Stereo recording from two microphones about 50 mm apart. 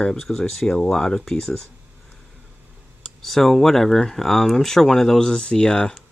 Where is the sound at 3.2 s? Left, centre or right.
Centre.